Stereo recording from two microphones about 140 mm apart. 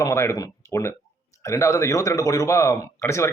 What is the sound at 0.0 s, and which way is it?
Speech, 25° left (ahead or behind).